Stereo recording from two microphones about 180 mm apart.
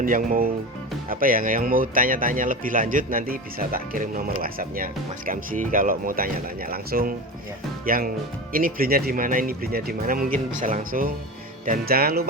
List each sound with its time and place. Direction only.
0.0 s speech: 45° right (ahead or behind)